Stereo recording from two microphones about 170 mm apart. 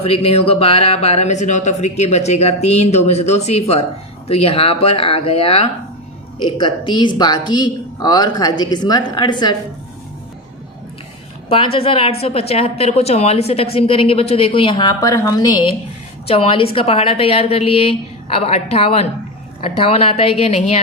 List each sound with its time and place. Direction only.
0.0 s speech: 35° left (ahead or behind)
11.4 s speech: 35° left (ahead or behind)